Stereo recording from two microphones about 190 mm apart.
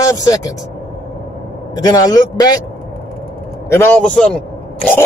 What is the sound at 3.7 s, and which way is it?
A man's voice, 10° left (ahead or behind).